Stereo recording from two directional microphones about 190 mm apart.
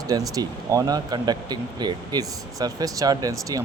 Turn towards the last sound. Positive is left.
turn(degrees=-20)  # may be behind; listen again after turning